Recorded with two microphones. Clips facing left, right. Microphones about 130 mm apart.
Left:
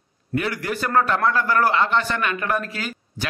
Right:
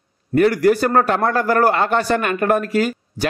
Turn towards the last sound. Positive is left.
turn(degrees=-45)  # may be behind; listen again after turning